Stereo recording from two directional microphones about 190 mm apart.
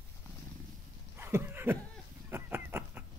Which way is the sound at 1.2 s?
10° right (ahead or behind).